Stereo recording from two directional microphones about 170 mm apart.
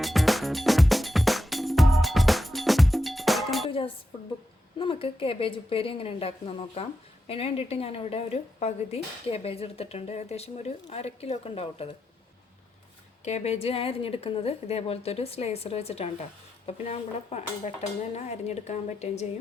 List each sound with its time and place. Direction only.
0.0 s music: centre (ahead or behind)
3.7 s dishes: 35° left (ahead or behind)
4.8 s a woman's voice: 30° left (ahead or behind)
13.2 s speech: 40° left (ahead or behind)
18.4 s speech: 40° left (ahead or behind)